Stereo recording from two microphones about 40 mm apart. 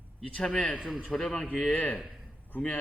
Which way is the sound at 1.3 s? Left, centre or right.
Left.